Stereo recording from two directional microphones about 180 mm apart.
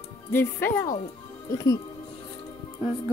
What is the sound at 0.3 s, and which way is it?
Music, 10° left (ahead or behind).